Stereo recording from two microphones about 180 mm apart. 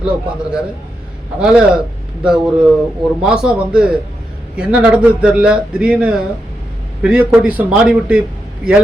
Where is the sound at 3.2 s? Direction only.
5° right (ahead or behind).